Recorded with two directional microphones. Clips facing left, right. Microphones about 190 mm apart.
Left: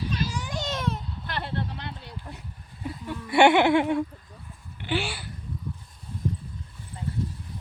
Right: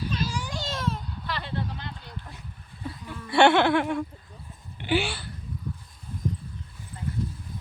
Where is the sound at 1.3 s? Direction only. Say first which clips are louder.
Left 1 dB; 60° left (ahead or behind).